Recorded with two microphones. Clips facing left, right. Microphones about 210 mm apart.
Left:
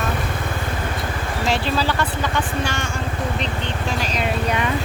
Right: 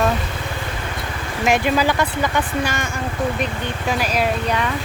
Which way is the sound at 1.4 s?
15° right (ahead or behind).